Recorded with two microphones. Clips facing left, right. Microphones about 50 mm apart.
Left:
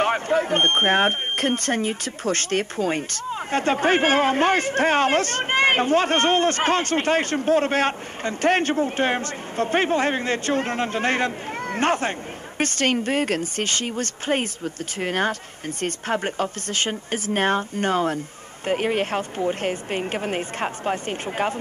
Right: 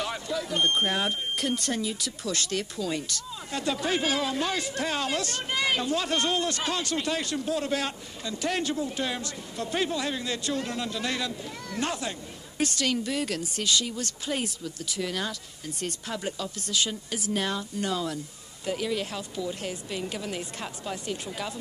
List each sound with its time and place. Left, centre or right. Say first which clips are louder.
0.0 s speech: left 11 dB; left